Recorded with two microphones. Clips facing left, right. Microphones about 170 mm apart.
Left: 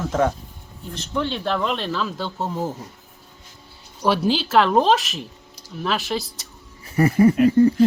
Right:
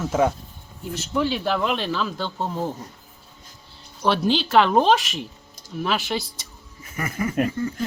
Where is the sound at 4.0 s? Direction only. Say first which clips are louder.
Left 1 dB; 5° left (ahead or behind).